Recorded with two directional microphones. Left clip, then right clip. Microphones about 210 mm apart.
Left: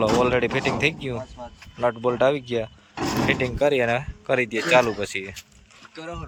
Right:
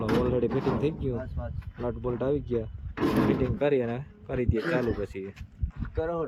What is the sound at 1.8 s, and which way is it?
Speech, 55° left (ahead or behind).